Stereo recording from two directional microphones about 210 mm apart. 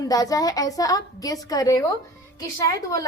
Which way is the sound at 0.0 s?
15° left (ahead or behind).